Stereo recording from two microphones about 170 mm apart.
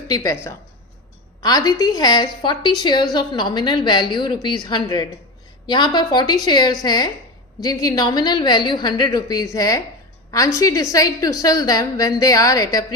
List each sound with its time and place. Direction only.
0.1 s a woman's voice: 20° left (ahead or behind)